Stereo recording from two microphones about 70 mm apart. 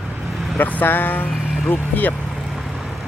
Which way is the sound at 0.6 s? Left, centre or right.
Left.